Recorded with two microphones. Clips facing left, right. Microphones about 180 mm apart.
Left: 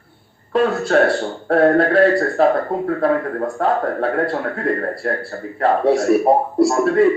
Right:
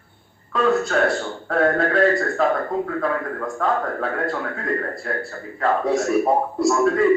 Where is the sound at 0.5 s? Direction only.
30° left (ahead or behind).